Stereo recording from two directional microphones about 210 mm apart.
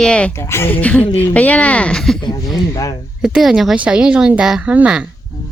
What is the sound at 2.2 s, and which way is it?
Speech, 20° left (ahead or behind).